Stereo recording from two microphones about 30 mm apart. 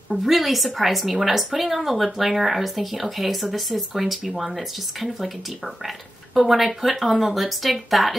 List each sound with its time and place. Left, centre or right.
0.1 s speech: centre
6.3 s speech: centre